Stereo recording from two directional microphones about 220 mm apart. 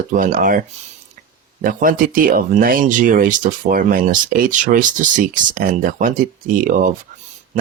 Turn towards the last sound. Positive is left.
turn(degrees=-35)  # may be behind; listen again after turning